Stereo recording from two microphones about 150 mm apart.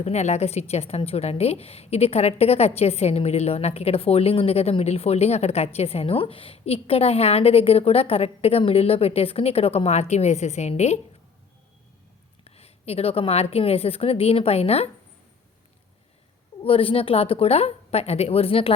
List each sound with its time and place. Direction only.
0.0 s a woman's voice: 45° left (ahead or behind)
12.5 s a woman's voice: 40° left (ahead or behind)
16.6 s a woman's voice: 40° left (ahead or behind)